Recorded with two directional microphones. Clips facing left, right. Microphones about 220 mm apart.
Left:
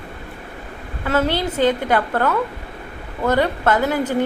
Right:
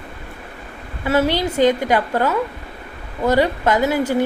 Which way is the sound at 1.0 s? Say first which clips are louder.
Right 2 dB; 10° right (ahead or behind).